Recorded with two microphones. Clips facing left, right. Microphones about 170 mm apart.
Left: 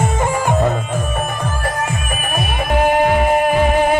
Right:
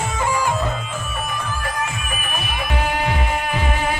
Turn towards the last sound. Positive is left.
turn(degrees=50)  # may be behind; listen again after turning